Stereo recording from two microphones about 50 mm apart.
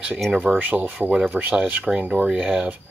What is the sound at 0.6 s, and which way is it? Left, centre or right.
Speech, right.